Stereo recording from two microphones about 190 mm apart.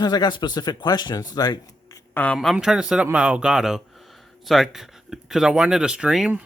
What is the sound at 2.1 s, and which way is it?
A man's voice, 5° left (ahead or behind).